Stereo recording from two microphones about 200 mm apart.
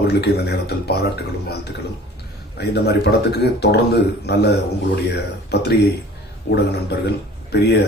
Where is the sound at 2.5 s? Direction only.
55° left (ahead or behind).